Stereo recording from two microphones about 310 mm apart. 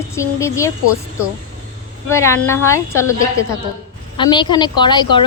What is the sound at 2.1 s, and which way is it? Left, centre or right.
A woman's voice, centre.